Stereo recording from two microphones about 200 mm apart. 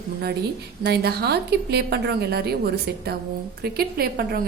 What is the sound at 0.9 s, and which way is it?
A woman's voice, 55° right (ahead or behind).